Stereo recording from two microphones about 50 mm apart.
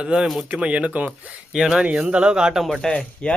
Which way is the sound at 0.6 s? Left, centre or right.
Right.